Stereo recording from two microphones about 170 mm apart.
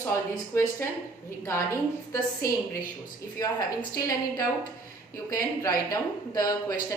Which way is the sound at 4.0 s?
20° left (ahead or behind).